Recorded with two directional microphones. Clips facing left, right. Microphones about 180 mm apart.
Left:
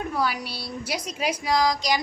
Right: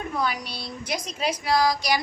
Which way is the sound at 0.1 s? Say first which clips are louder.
Left 1 dB; 10° left (ahead or behind).